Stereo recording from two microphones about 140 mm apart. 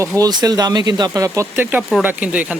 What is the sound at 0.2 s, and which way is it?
Speech, 30° right (ahead or behind).